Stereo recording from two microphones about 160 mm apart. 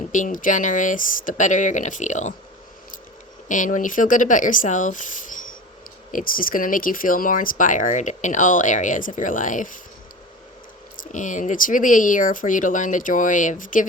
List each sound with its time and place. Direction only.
0.1 s speech: 55° left (ahead or behind)
3.5 s speech: 55° left (ahead or behind)
11.0 s speech: 55° left (ahead or behind)